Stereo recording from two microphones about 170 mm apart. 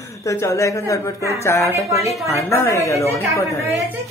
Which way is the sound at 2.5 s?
15° left (ahead or behind).